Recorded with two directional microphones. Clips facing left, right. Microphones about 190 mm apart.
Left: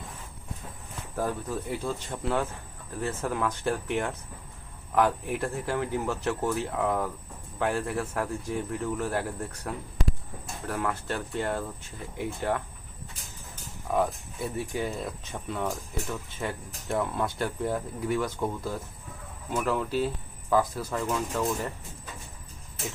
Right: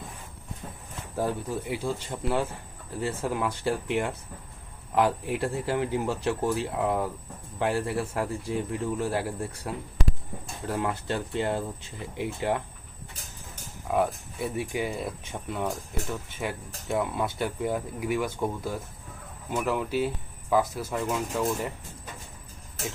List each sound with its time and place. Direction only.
1.1 s speech: 15° right (ahead or behind)
10.7 s speech: 25° right (ahead or behind)
13.9 s speech: 15° right (ahead or behind)